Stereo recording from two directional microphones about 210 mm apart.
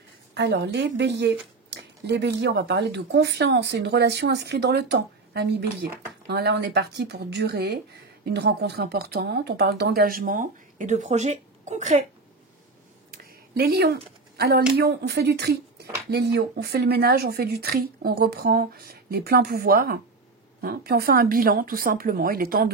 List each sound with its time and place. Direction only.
0.3 s speech: 55° right (ahead or behind); by 12.0 s 35° right (ahead or behind)
13.1 s a sound: 45° right (ahead or behind)
14.7 s speech: 50° right (ahead or behind)